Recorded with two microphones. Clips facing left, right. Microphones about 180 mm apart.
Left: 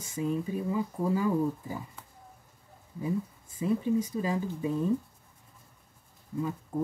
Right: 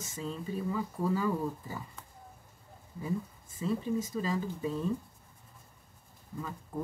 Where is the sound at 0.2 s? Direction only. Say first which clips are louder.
Left 6 dB; 15° left (ahead or behind).